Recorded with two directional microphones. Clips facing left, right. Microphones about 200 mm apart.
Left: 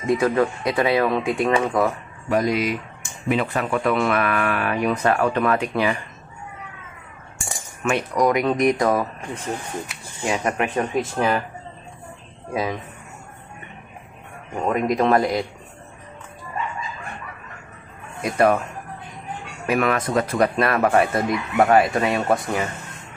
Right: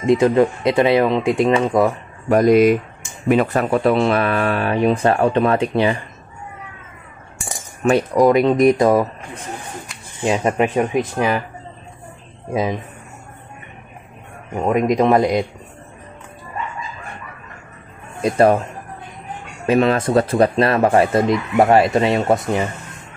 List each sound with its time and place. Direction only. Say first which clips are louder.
0.0 s speech: right 5 dB; 20° right (ahead or behind)
2.2 s speech: right 9 dB; 50° right (ahead or behind); by 5.9 s 30° right (ahead or behind)
7.9 s speech: right 6 dB; 30° right (ahead or behind)
10.2 s speech: right 5 dB; 30° right (ahead or behind)
10.8 s speech: right 4 dB; 10° right (ahead or behind)
14.5 s speech: right 4 dB; 15° right (ahead or behind)
18.2 s speech: right 4 dB; 30° right (ahead or behind)
19.6 s speech: right 5 dB; 25° right (ahead or behind)